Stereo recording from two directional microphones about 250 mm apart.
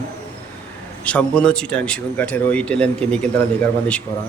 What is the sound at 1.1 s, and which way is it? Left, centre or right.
Speech, centre.